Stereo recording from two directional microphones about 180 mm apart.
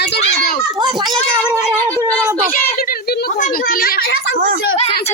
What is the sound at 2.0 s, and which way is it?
Child singing, 15° right (ahead or behind).